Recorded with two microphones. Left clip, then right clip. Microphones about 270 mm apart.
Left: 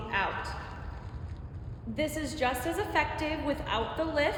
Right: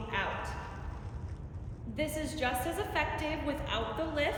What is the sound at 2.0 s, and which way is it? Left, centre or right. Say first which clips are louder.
A woman's voice: left 3 dB; left.